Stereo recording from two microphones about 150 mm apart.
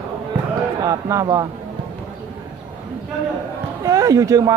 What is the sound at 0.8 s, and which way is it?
Speech, 25° right (ahead or behind).